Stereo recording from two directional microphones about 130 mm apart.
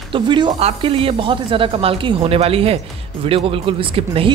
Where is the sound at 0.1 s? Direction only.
35° right (ahead or behind).